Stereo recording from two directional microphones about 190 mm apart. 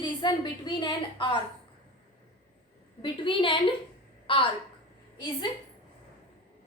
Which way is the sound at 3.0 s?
25° left (ahead or behind).